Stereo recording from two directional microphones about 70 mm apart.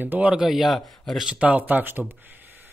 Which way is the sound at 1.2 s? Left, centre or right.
Centre.